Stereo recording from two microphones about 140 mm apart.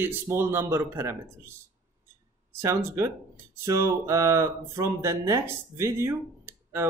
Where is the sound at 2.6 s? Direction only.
20° right (ahead or behind).